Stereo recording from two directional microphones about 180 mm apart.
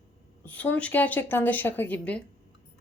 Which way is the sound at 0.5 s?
10° left (ahead or behind).